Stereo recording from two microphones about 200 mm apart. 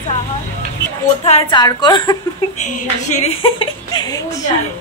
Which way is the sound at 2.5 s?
35° left (ahead or behind).